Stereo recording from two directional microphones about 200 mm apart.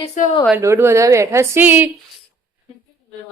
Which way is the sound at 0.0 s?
35° left (ahead or behind).